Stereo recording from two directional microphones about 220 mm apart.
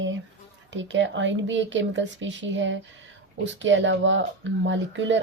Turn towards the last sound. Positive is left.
turn(degrees=-55)  # may be behind; listen again after turning